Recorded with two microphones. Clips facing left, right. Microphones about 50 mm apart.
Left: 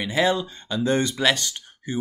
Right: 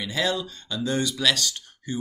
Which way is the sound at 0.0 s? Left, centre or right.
Left.